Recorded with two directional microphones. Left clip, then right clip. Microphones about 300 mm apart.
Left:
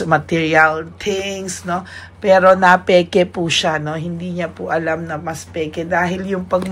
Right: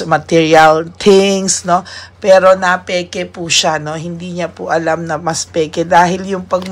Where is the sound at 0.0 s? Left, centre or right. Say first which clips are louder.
Right 5 dB; centre.